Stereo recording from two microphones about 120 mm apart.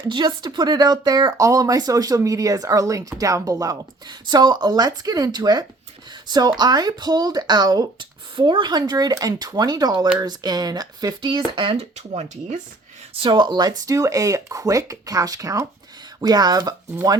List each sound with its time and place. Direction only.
0.1 s speech: 40° right (ahead or behind)
11.8 s speech: 60° right (ahead or behind)
13.1 s speech: 45° right (ahead or behind)